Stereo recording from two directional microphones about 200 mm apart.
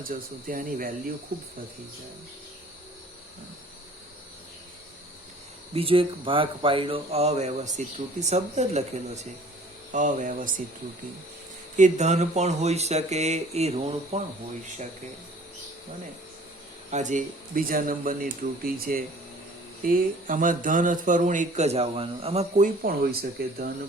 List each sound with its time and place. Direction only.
0.0 s speech: 45° right (ahead or behind)
5.7 s speech: 30° right (ahead or behind)
9.9 s speech: 40° right (ahead or behind)
11.8 s speech: 35° right (ahead or behind)
16.9 s speech: 40° right (ahead or behind)